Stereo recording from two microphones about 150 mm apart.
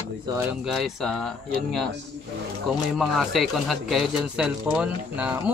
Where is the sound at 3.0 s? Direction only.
Centre (ahead or behind).